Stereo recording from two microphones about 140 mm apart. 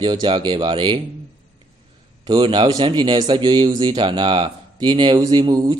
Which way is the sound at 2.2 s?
30° right (ahead or behind).